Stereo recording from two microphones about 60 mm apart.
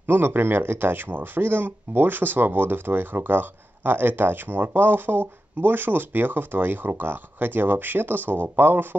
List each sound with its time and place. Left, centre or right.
0.0 s speech: right